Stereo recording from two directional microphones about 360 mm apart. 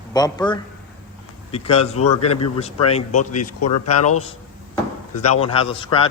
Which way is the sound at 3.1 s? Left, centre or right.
Left.